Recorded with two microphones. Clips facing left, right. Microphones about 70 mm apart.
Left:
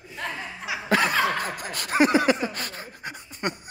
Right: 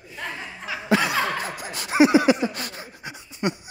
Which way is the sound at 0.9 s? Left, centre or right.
Left.